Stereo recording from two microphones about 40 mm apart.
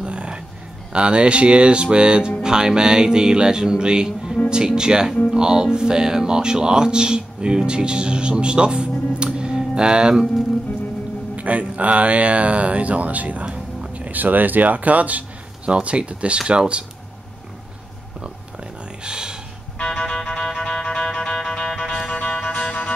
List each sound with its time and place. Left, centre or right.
0.0 s a sound: right
0.9 s music: right
5.3 s speech: centre
11.3 s speech: right
13.9 s a sound: right
14.2 s speech: right
16.3 s music: right
19.0 s a sound: right
19.8 s music: centre
21.6 s music: centre
22.5 s music: left